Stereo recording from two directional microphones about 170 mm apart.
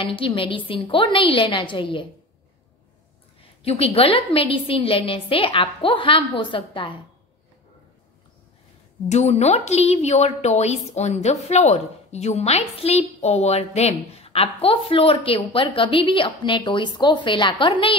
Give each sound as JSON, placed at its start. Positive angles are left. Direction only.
{"t": 0.0, "sound": "a woman's voice", "side_deg": 30}
{"t": 3.6, "sound": "a woman's voice", "side_deg": 35}
{"t": 9.1, "sound": "a woman's voice", "side_deg": 40}